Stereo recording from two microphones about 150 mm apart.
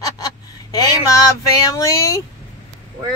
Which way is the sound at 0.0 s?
25° left (ahead or behind).